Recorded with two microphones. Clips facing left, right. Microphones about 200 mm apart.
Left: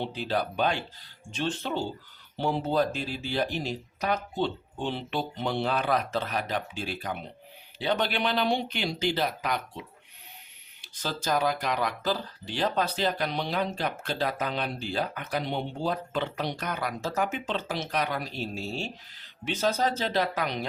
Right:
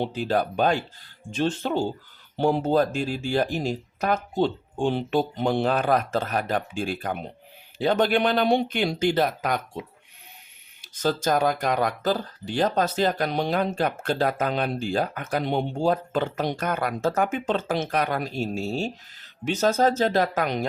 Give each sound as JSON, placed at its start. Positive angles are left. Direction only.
{"t": 0.0, "sound": "speech", "side_deg": -45}